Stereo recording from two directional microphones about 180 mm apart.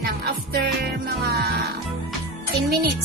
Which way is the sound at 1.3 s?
60° right (ahead or behind).